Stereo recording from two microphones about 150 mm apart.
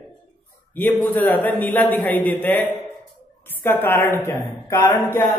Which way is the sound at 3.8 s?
15° left (ahead or behind).